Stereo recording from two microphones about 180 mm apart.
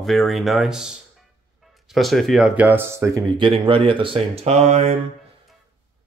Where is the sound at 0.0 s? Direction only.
Centre (ahead or behind).